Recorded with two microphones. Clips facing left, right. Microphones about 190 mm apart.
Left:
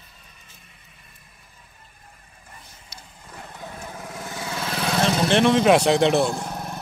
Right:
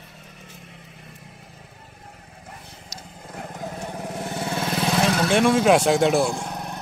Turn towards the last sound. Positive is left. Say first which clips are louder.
# even
turn(degrees=0)  # may be behind; listen again after turning